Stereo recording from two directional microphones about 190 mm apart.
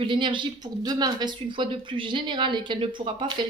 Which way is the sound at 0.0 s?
25° right (ahead or behind).